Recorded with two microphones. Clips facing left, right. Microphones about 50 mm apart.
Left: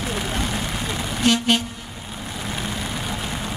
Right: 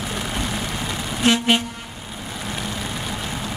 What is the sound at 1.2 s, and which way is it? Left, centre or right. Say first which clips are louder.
Vehicle: right 1 dB; centre.